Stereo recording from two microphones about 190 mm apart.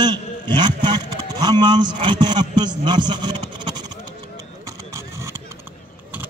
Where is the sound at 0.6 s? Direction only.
25° right (ahead or behind).